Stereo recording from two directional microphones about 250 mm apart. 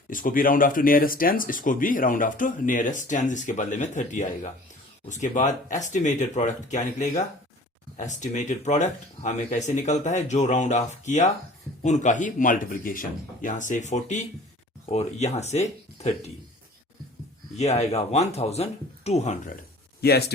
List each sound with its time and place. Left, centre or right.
0.1 s speech: left
17.6 s speech: left
20.0 s speech: left